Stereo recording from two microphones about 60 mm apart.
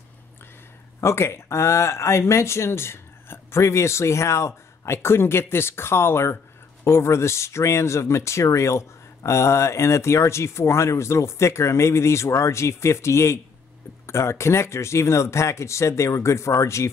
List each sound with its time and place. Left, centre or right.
1.0 s speech: left